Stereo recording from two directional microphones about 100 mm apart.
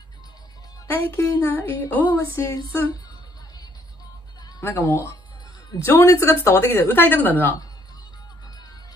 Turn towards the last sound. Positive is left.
turn(degrees=20)  # may be behind; listen again after turning